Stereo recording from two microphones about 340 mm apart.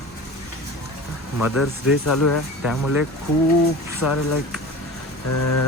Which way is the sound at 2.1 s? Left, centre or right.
Left.